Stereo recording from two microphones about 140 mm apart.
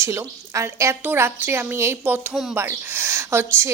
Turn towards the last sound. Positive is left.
turn(degrees=-20)  # may be behind; listen again after turning